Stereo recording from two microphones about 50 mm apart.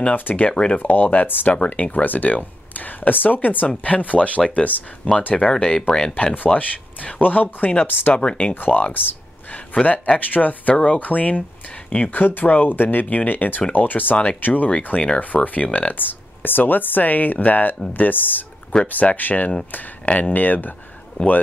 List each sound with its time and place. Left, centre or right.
0.1 s speech: left
0.5 s speech: centre
0.7 s speech: left
5.3 s speech: centre
6.1 s speech: left
8.2 s speech: left
8.5 s a man's voice: left